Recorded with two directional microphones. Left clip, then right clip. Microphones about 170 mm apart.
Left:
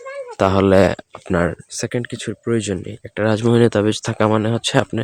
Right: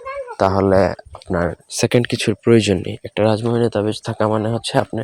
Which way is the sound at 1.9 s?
30° right (ahead or behind).